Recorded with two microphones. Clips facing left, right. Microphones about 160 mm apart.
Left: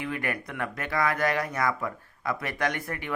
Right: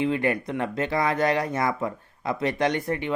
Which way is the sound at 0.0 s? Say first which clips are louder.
Right 8 dB; 25° right (ahead or behind).